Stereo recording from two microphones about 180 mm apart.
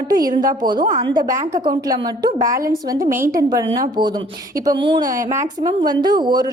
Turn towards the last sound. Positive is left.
turn(degrees=-25)  # may be behind; listen again after turning